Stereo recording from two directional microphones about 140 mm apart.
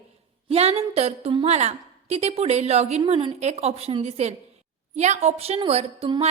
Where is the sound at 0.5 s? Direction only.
45° right (ahead or behind).